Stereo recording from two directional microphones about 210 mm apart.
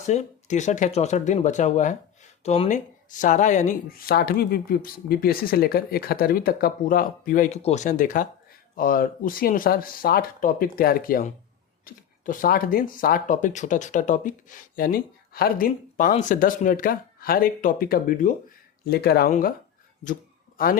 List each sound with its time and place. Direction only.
0.0 s speech: 35° left (ahead or behind)
20.6 s speech: 45° left (ahead or behind)